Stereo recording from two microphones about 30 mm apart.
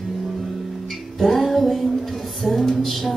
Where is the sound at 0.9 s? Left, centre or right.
Centre.